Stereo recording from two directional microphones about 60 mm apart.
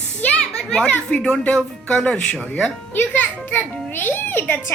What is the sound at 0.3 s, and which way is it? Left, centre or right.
Children playing, centre.